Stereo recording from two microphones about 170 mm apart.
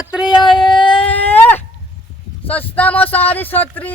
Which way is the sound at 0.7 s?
30° left (ahead or behind).